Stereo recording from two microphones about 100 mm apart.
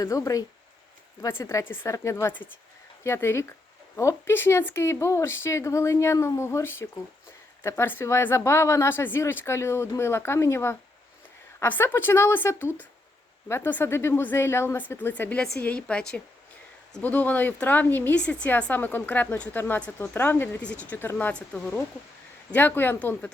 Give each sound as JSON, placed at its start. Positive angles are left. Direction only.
{"t": 0.0, "sound": "a woman's voice", "side_deg": 35}